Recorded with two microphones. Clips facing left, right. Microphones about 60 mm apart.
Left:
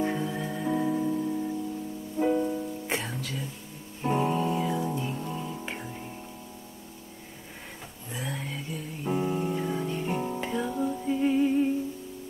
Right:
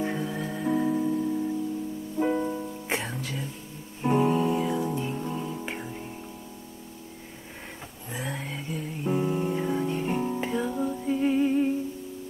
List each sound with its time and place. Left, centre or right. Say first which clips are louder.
0.0 s music: left 1 dB; centre
2.2 s music: left 2 dB; centre
8.1 s a sound: right 1 dB; centre
9.0 s music: right 2 dB; centre